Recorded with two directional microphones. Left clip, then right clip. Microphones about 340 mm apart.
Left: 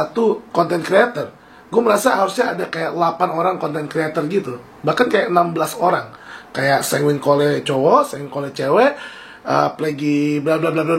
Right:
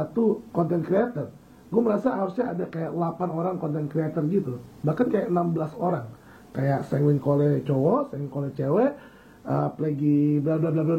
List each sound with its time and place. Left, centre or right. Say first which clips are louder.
0.0 s speech: left 7 dB; centre
7.7 s speech: left 10 dB; centre